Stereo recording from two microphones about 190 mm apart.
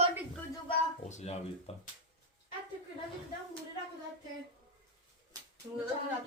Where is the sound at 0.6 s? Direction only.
35° left (ahead or behind).